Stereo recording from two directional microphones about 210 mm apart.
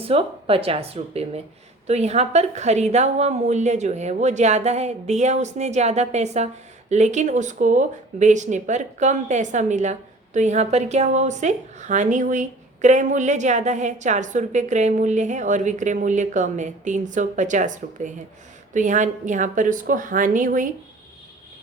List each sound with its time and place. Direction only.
0.0 s speech: 25° right (ahead or behind)